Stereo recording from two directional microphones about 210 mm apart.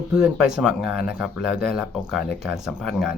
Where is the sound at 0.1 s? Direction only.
Centre (ahead or behind).